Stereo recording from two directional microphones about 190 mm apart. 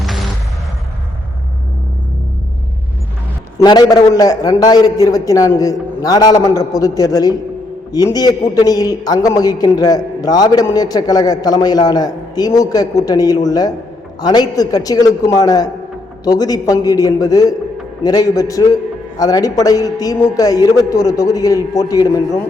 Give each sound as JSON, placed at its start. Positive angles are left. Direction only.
{"t": 3.6, "sound": "a man's voice", "side_deg": 20}